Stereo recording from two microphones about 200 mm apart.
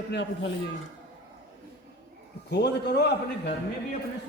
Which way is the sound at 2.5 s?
55° left (ahead or behind).